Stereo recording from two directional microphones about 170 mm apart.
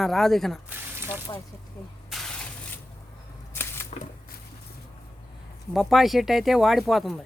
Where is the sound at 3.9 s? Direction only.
40° left (ahead or behind).